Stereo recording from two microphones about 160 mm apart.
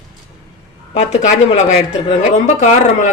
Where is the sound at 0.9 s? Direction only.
45° left (ahead or behind).